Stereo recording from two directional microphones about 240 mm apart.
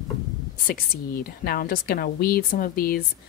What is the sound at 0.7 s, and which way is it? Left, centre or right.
A woman's voice, left.